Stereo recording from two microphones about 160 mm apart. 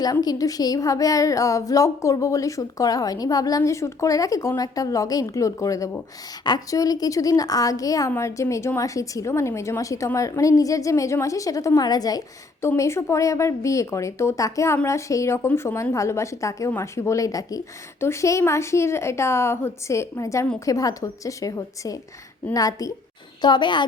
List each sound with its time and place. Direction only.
0.0 s a woman's voice: 25° left (ahead or behind)